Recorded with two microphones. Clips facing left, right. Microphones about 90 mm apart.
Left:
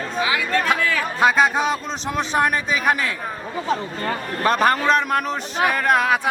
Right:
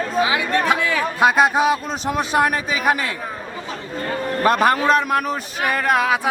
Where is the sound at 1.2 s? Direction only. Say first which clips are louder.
Right 2 dB; 5° right (ahead or behind).